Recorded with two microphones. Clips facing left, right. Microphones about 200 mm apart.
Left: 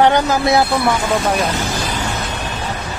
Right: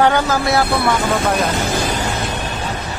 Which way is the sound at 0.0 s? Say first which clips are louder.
Left 2 dB; 20° left (ahead or behind).